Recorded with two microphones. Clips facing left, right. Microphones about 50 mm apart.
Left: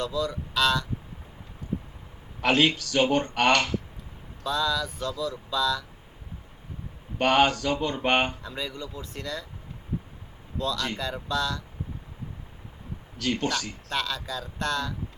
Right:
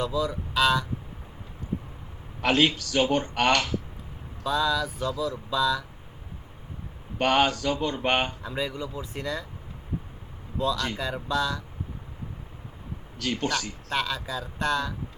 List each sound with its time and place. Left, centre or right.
0.0 s speech: centre
2.4 s speech: centre
7.2 s speech: centre
8.4 s speech: centre
10.6 s speech: centre
13.1 s speech: centre